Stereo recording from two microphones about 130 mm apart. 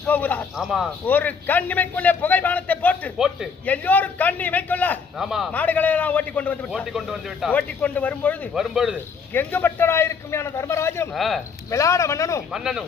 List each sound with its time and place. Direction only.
0.1 s a man's voice: 15° left (ahead or behind)
0.5 s speech: centre (ahead or behind)
1.0 s a man's voice: 15° left (ahead or behind)
3.2 s speech: 5° right (ahead or behind)
3.7 s a man's voice: 10° left (ahead or behind)
5.1 s speech: centre (ahead or behind)
5.5 s a man's voice: 10° left (ahead or behind)
6.7 s speech: 5° right (ahead or behind)
7.5 s a man's voice: 10° left (ahead or behind)
8.5 s speech: 5° right (ahead or behind)
9.3 s a man's voice: 15° left (ahead or behind)
11.1 s speech: centre (ahead or behind)
11.7 s a man's voice: 25° left (ahead or behind)
12.5 s speech: 5° right (ahead or behind)